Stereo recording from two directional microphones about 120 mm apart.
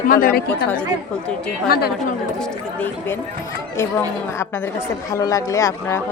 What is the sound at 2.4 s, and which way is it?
Speech, 15° left (ahead or behind).